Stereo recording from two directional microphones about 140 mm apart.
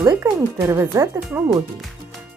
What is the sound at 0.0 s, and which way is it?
Speech, 20° right (ahead or behind).